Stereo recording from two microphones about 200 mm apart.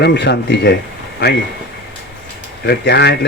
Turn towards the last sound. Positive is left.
turn(degrees=55)  # may be behind; listen again after turning